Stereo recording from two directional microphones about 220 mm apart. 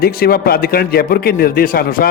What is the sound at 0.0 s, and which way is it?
Speech, 45° left (ahead or behind).